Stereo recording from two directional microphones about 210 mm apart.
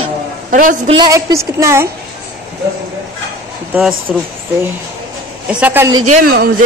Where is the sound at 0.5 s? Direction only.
40° right (ahead or behind).